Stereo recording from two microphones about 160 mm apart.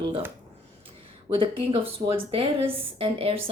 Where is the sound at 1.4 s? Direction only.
35° right (ahead or behind).